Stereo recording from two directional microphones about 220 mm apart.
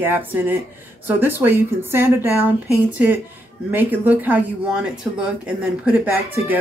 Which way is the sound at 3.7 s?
10° right (ahead or behind).